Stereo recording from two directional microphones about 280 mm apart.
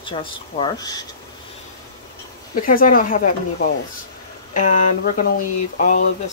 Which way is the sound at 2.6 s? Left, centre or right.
Left.